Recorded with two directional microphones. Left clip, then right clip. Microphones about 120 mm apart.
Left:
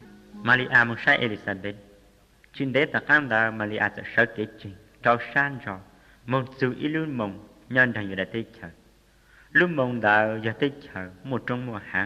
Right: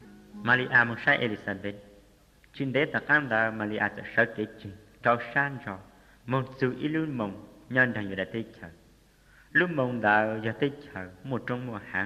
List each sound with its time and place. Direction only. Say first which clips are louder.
0.4 s a man's voice: left 3 dB; 35° right (ahead or behind)